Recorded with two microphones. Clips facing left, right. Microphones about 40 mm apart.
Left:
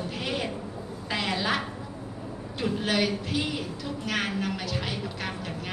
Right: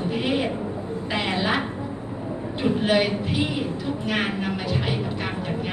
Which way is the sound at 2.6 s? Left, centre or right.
Right.